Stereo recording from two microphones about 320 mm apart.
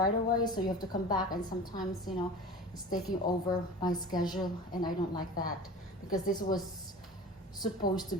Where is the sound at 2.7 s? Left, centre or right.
Left.